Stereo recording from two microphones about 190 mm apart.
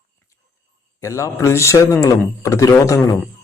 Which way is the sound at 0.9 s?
15° left (ahead or behind).